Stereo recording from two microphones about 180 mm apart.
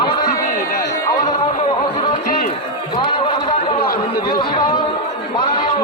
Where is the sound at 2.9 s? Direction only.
25° left (ahead or behind).